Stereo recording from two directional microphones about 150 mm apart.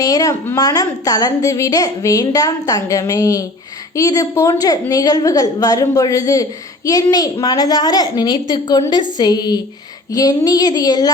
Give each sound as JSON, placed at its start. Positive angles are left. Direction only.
{"t": 0.0, "sound": "a woman's voice", "side_deg": 25}